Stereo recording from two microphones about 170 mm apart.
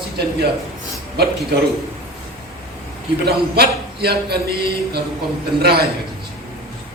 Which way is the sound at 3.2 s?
65° right (ahead or behind).